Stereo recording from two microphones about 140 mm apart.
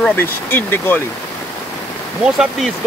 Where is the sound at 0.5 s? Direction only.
15° left (ahead or behind).